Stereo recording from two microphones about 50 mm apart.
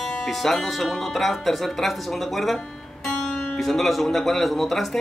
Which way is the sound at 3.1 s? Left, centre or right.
Centre.